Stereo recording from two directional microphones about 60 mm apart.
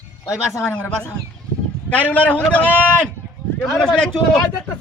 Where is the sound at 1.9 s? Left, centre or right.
Left.